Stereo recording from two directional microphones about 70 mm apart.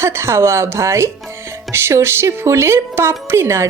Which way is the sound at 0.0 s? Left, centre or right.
Right.